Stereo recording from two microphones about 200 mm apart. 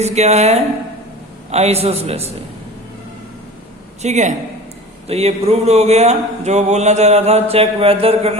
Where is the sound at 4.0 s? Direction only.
35° right (ahead or behind).